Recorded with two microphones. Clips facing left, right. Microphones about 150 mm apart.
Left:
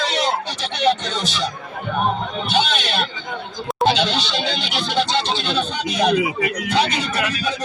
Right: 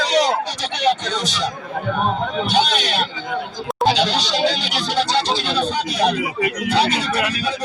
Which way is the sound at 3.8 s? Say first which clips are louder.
Right 1 dB; 40° right (ahead or behind).